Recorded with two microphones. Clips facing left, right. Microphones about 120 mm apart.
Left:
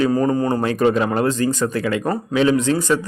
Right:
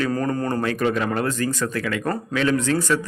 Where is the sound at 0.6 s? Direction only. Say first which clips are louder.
Left 5 dB; 25° left (ahead or behind).